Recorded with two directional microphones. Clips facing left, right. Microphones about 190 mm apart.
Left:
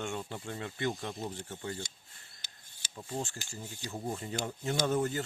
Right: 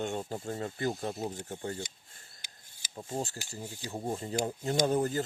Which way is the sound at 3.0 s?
25° right (ahead or behind).